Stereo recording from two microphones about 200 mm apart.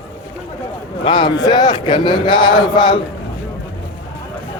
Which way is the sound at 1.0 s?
25° left (ahead or behind).